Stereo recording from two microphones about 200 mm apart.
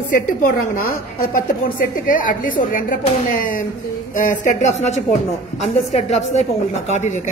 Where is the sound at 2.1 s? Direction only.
45° left (ahead or behind).